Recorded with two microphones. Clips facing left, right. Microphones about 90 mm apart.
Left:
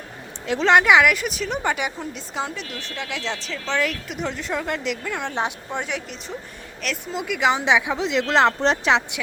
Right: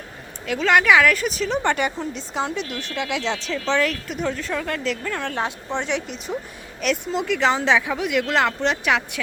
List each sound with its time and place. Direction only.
0.4 s a woman's voice: 25° left (ahead or behind)
1.1 s speech: 5° left (ahead or behind)
4.4 s a woman's voice: 20° left (ahead or behind)
5.8 s a woman's voice: centre (ahead or behind); by 9.2 s 20° left (ahead or behind)